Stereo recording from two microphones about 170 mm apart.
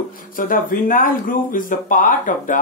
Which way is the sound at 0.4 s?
55° left (ahead or behind).